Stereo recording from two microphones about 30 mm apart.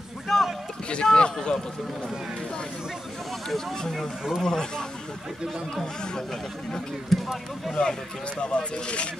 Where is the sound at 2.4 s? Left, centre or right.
Left.